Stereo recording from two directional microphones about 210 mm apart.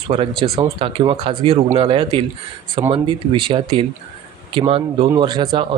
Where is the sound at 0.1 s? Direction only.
25° right (ahead or behind).